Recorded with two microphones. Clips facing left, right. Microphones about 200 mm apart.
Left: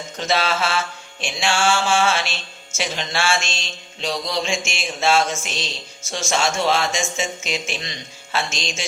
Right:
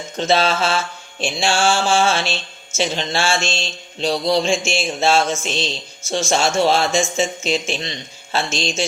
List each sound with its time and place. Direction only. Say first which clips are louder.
0.2 s speech: right 4 dB; 25° right (ahead or behind)
1.2 s mantra: right 3 dB; 30° right (ahead or behind)
2.7 s speech: right 4 dB; 30° right (ahead or behind)
8.5 s mantra: right 7 dB; 30° right (ahead or behind)